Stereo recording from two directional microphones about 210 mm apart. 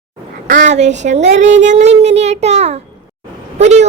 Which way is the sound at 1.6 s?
30° right (ahead or behind).